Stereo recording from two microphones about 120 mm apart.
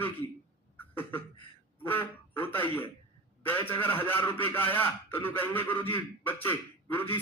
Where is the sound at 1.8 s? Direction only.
15° left (ahead or behind).